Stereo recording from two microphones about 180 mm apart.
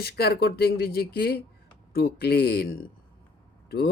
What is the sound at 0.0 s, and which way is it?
Speech, 60° left (ahead or behind).